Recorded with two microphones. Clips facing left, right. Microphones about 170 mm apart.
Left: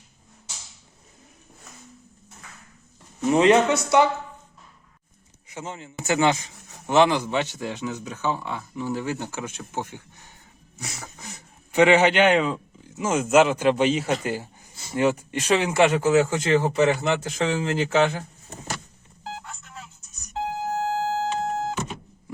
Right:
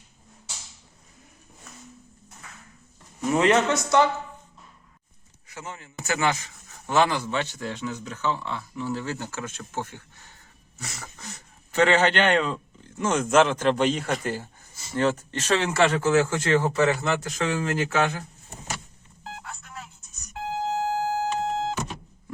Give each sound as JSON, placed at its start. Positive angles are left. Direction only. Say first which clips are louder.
{"t": 3.2, "sound": "speech", "louder": "left 3 dB", "side_deg": 20}
{"t": 5.5, "sound": "speech", "louder": "left 4 dB", "side_deg": 20}
{"t": 20.7, "sound": "a sound", "louder": "left 1 dB", "side_deg": -15}